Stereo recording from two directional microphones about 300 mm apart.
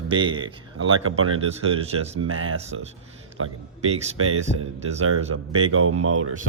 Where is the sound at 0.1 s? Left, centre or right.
Centre.